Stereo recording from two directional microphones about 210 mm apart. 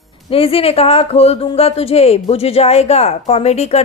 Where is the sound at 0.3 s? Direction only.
25° left (ahead or behind).